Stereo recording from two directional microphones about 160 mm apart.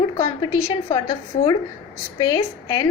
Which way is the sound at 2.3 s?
25° left (ahead or behind).